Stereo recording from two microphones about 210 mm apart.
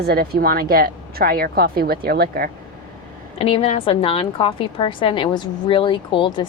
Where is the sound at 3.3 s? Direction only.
30° left (ahead or behind).